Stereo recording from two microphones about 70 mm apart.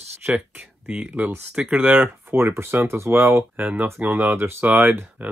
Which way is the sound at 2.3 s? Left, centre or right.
Right.